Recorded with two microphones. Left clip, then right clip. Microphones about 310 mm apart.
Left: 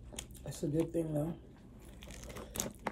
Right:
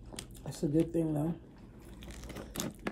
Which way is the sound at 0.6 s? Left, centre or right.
Centre.